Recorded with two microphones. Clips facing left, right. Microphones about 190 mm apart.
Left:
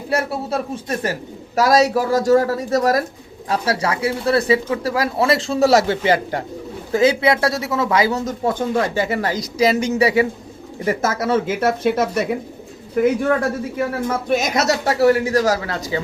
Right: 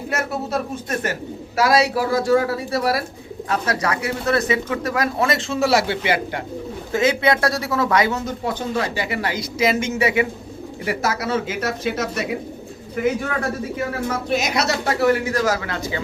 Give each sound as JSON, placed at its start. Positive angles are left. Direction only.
{"t": 0.1, "sound": "speech", "side_deg": 30}
{"t": 1.5, "sound": "speech", "side_deg": 40}
{"t": 3.5, "sound": "speech", "side_deg": 30}
{"t": 10.8, "sound": "speech", "side_deg": 50}
{"t": 14.3, "sound": "speech", "side_deg": 50}